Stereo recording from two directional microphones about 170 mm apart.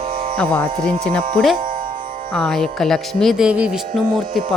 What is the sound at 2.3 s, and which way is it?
Speech, 5° left (ahead or behind).